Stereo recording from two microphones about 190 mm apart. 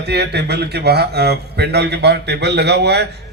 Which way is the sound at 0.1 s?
60° right (ahead or behind).